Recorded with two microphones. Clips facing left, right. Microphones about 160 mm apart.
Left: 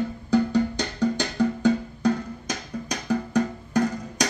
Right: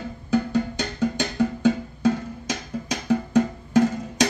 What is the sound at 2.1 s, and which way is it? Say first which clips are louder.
Music: right 1 dB; 25° right (ahead or behind).